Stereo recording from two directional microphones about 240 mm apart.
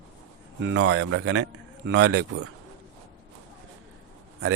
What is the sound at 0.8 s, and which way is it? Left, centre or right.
Speech, right.